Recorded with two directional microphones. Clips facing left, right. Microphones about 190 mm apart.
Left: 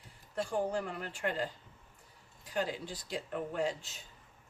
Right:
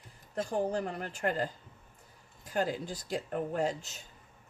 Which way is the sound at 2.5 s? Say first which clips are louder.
Right 3 dB; 45° right (ahead or behind).